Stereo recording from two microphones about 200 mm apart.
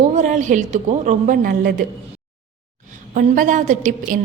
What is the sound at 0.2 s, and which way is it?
A woman's voice, 40° right (ahead or behind).